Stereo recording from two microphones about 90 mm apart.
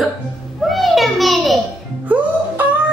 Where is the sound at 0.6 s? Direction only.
Centre (ahead or behind).